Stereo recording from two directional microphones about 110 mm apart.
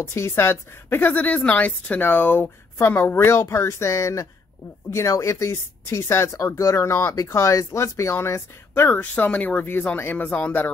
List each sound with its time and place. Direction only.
0.0 s speech: 25° left (ahead or behind)